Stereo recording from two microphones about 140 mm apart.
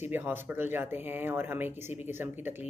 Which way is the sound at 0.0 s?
15° right (ahead or behind).